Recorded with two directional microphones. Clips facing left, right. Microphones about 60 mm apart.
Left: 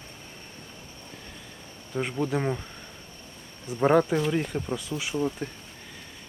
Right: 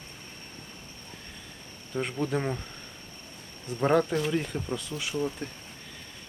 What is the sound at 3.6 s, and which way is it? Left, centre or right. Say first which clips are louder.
Speech: left 3 dB; centre.